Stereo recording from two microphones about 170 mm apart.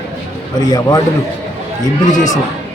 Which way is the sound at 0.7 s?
20° left (ahead or behind).